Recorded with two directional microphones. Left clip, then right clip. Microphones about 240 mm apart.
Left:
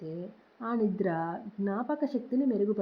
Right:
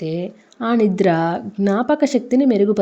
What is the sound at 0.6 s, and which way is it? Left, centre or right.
Speech, right.